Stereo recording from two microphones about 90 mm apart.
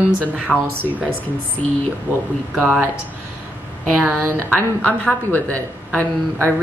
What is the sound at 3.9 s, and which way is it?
Speech, 25° right (ahead or behind).